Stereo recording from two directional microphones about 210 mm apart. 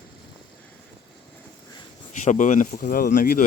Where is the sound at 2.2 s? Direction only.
35° left (ahead or behind).